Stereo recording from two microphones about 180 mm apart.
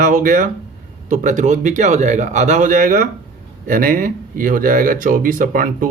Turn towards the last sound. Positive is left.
turn(degrees=-50)  # may be behind; listen again after turning